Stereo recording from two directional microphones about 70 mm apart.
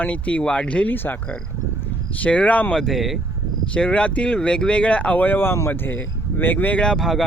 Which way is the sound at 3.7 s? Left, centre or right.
Centre.